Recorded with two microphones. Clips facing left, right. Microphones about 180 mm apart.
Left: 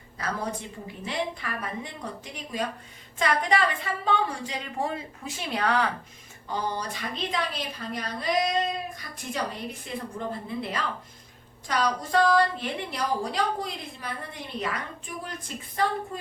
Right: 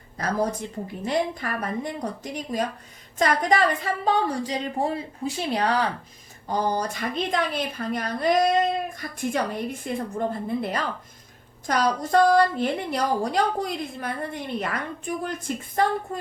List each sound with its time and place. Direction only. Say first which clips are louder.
1.0 s a woman's voice: right 6 dB; 45° right (ahead or behind)
6.5 s a woman's voice: right 6 dB; 45° right (ahead or behind)